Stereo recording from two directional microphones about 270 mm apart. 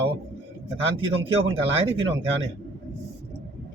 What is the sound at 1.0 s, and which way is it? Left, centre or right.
Speech, centre.